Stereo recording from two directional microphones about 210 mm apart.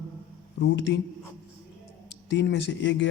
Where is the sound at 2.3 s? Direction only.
60° left (ahead or behind).